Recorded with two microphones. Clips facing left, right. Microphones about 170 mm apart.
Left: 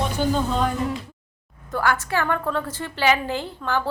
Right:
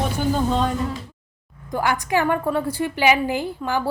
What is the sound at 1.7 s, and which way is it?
A woman's voice, 15° right (ahead or behind).